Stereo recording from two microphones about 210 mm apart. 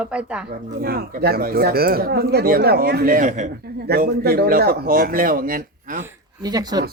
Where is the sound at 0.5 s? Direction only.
45° right (ahead or behind).